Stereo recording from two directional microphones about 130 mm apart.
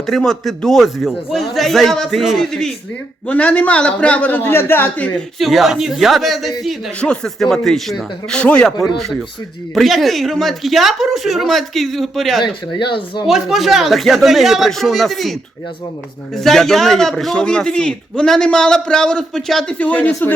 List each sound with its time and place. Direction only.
0.0 s a man's voice: 5° left (ahead or behind)
5.4 s a man's voice: centre (ahead or behind)
9.7 s a man's voice: centre (ahead or behind)
12.4 s speech: 35° left (ahead or behind)
13.2 s a man's voice: centre (ahead or behind)